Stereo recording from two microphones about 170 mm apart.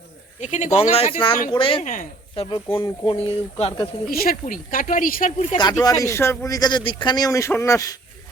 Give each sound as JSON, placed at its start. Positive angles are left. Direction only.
{"t": 0.3, "sound": "speech", "side_deg": 45}
{"t": 1.8, "sound": "speech", "side_deg": 50}
{"t": 2.3, "sound": "speech", "side_deg": 35}
{"t": 4.1, "sound": "speech", "side_deg": 60}
{"t": 5.5, "sound": "speech", "side_deg": 25}